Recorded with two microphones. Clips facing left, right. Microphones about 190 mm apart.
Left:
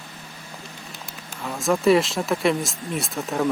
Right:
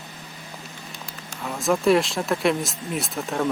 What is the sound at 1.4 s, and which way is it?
Speech, centre (ahead or behind).